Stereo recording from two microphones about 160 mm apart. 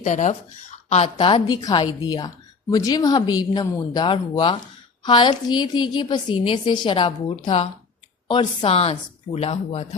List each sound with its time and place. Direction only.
0.0 s a woman's voice: 50° left (ahead or behind)